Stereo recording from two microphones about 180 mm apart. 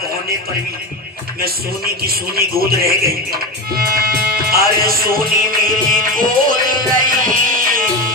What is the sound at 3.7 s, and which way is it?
Music, 55° right (ahead or behind).